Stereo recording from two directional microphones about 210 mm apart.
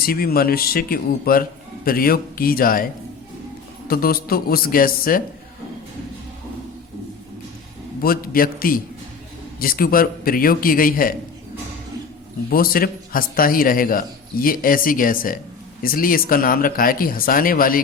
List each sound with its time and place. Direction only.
0.0 s a man's voice: 45° left (ahead or behind)
3.8 s a man's voice: 45° left (ahead or behind)
8.0 s a man's voice: 45° left (ahead or behind)
12.5 s a man's voice: 45° left (ahead or behind)